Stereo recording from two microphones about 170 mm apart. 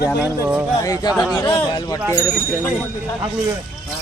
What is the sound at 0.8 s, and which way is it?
Speech, 20° left (ahead or behind).